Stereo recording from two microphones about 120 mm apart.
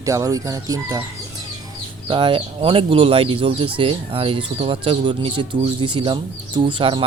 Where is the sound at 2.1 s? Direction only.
45° right (ahead or behind).